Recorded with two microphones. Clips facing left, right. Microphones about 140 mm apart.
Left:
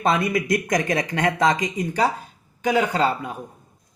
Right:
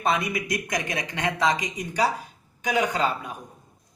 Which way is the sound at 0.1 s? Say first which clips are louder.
Left 5 dB; 50° left (ahead or behind).